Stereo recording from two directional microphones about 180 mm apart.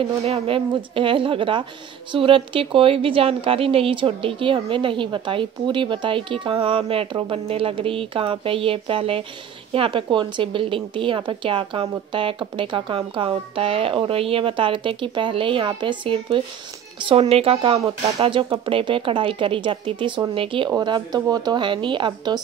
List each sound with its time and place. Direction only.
0.2 s speech: 35° right (ahead or behind)